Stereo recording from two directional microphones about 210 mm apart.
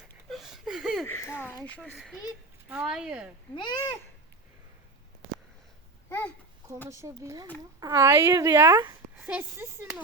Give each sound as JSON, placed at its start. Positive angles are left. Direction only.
{"t": 0.3, "sound": "a sound", "side_deg": 0}
{"t": 1.0, "sound": "speech", "side_deg": 10}
{"t": 3.5, "sound": "a child's voice", "side_deg": 20}
{"t": 6.1, "sound": "a child's voice", "side_deg": 10}
{"t": 6.8, "sound": "speech", "side_deg": -15}